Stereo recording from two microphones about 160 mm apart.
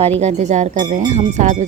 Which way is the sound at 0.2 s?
45° right (ahead or behind).